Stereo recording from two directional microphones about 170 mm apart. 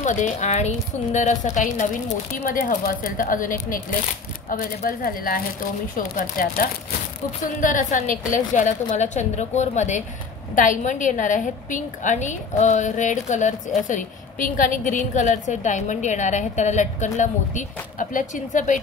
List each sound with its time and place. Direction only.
0.0 s a woman's voice: 45° left (ahead or behind)